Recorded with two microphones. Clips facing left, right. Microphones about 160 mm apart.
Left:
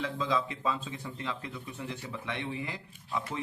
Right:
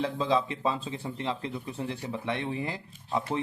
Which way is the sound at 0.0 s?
35° right (ahead or behind).